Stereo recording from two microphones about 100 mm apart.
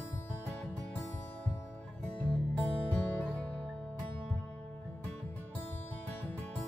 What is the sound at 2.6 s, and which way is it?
Music, 15° left (ahead or behind).